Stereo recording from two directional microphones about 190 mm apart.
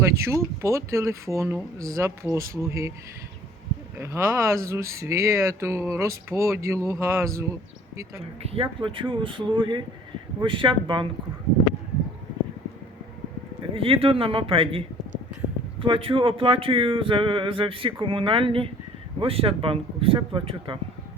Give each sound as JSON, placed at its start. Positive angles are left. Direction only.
{"t": 0.0, "sound": "speech", "side_deg": -15}
{"t": 3.9, "sound": "speech", "side_deg": -15}
{"t": 8.4, "sound": "speech", "side_deg": -30}
{"t": 13.7, "sound": "speech", "side_deg": -30}